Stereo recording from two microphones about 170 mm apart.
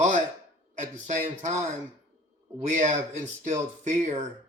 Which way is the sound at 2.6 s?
45° right (ahead or behind).